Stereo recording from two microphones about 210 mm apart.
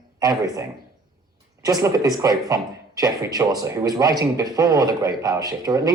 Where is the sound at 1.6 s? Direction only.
15° right (ahead or behind).